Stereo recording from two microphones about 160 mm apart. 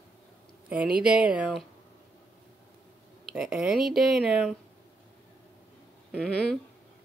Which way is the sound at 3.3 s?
5° right (ahead or behind).